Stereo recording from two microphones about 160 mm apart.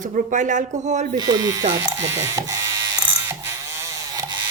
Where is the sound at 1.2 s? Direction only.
25° right (ahead or behind).